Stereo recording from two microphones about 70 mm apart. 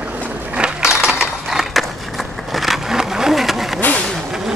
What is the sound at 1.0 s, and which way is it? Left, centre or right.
Skateboard, centre.